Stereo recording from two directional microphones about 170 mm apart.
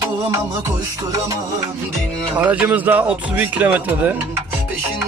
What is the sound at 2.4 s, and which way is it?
Speech, 5° right (ahead or behind).